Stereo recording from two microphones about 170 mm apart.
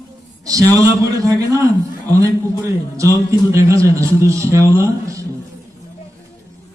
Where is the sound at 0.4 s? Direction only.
20° right (ahead or behind).